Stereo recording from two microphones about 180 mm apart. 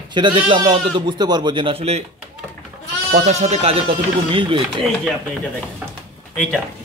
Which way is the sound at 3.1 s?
40° right (ahead or behind).